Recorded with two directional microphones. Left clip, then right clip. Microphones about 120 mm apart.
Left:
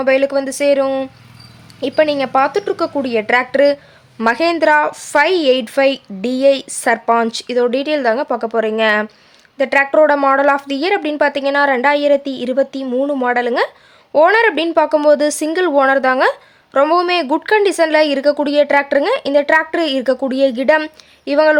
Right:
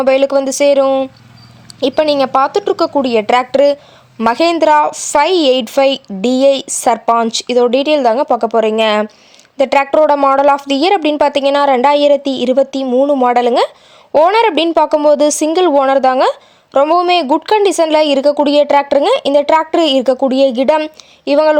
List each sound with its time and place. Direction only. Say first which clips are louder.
0.0 s a woman's voice: right 3 dB; 40° right (ahead or behind)
1.8 s a woman's voice: right 3 dB; 45° right (ahead or behind)
12.9 s a woman's voice: right 6 dB; 25° right (ahead or behind)